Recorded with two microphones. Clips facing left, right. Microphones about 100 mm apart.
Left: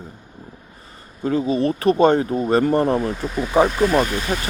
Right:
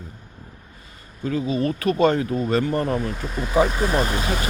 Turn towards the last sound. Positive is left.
turn(degrees=-30)  # may be behind; listen again after turning